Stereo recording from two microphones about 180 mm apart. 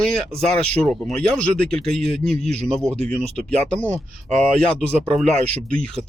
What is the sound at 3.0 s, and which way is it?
Speech, 35° right (ahead or behind).